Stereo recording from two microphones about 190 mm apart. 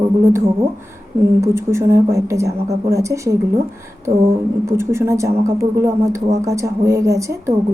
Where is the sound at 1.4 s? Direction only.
15° right (ahead or behind).